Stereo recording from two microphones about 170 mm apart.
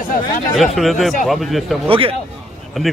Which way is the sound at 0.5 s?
Centre (ahead or behind).